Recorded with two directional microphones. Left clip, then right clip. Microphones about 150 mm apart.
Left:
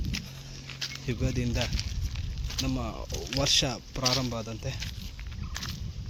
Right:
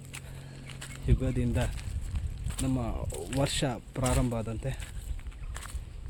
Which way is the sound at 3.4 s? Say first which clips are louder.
Left 7 dB; 20° right (ahead or behind).